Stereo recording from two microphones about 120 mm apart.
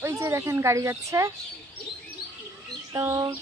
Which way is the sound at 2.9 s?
30° right (ahead or behind).